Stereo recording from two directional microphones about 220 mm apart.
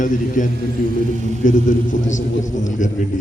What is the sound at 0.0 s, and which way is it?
Speech, 35° left (ahead or behind).